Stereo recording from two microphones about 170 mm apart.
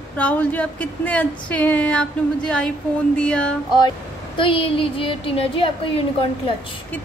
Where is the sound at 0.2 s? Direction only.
10° left (ahead or behind).